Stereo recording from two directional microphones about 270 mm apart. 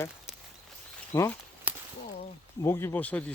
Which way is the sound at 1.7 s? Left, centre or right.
Centre.